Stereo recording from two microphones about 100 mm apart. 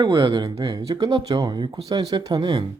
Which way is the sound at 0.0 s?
45° right (ahead or behind).